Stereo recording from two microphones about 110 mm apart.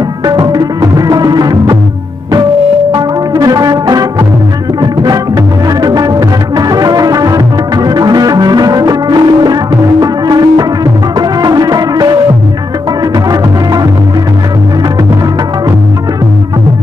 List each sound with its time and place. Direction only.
0.2 s music: 35° right (ahead or behind)
2.9 s music: 35° right (ahead or behind)
13.3 s music: 35° right (ahead or behind)